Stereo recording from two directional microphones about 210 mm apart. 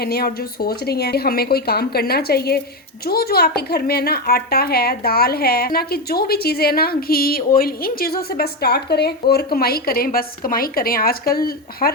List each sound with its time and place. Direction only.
0.0 s speech: 45° left (ahead or behind)